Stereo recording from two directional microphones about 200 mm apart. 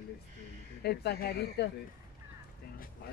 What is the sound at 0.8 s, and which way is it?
Speech, 55° left (ahead or behind).